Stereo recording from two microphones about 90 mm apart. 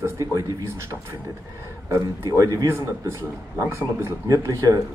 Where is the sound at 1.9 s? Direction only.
35° right (ahead or behind).